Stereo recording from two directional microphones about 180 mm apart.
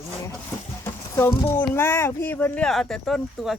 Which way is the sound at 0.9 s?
15° left (ahead or behind).